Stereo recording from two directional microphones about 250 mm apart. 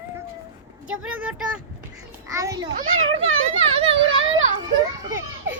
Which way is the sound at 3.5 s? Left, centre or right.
Right.